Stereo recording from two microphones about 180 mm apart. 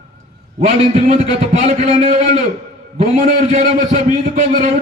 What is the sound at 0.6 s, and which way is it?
A man's voice, 40° right (ahead or behind).